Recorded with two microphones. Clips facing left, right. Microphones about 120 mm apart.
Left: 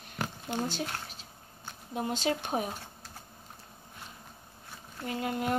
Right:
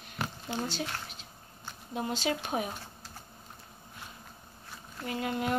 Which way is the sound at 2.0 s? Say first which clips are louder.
Left 1 dB; 45° left (ahead or behind).